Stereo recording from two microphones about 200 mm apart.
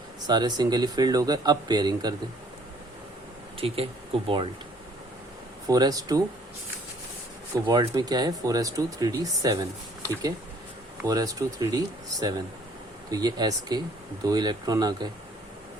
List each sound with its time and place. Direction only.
0.3 s speech: 20° right (ahead or behind)
3.6 s speech: 30° right (ahead or behind)
5.6 s speech: 20° right (ahead or behind)
7.5 s speech: 20° right (ahead or behind)
11.0 s speech: 20° right (ahead or behind)